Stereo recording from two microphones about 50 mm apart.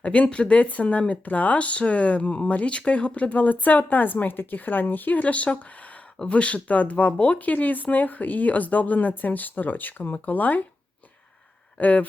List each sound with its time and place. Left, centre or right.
0.0 s speech: left
11.8 s speech: left